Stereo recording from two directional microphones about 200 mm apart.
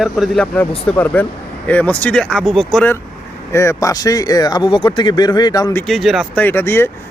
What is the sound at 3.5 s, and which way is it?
Speech, 15° left (ahead or behind).